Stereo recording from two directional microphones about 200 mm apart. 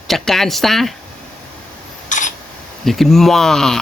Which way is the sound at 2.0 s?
40° left (ahead or behind).